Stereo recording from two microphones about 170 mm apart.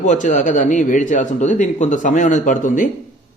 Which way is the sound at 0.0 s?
45° left (ahead or behind).